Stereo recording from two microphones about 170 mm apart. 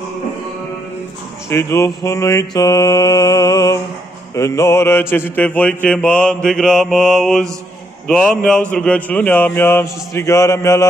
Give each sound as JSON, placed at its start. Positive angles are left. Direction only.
{"t": 1.5, "sound": "mantra", "side_deg": 15}
{"t": 8.5, "sound": "speech", "side_deg": 5}